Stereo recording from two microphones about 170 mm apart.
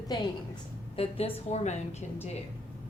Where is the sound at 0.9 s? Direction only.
35° left (ahead or behind).